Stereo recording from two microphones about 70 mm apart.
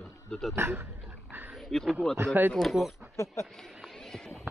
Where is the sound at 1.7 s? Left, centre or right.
Centre.